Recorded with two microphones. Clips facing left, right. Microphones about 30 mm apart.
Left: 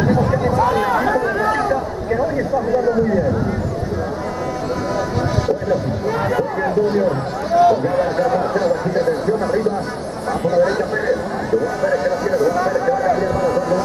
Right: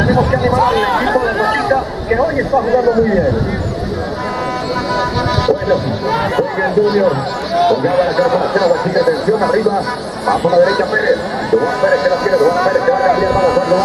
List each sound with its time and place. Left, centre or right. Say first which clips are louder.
0.1 s speech: right 4 dB; right
6.3 s speech: right 4 dB; right